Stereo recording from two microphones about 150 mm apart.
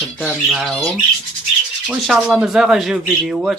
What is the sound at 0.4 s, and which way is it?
Speech, centre (ahead or behind).